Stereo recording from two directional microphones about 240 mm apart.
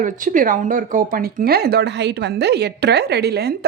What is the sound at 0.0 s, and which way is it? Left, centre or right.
Speech, right.